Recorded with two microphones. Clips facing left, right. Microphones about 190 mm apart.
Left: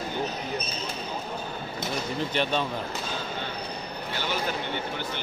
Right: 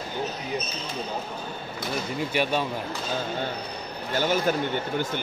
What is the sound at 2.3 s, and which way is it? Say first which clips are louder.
Speech: right 2 dB; 10° right (ahead or behind).